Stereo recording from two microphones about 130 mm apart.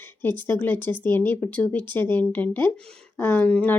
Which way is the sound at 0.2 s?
15° left (ahead or behind).